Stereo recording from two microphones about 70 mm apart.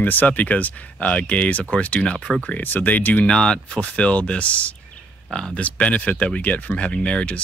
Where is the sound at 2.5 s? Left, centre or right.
Left.